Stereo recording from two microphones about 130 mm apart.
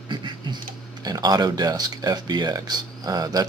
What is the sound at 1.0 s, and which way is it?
Speech, 30° right (ahead or behind).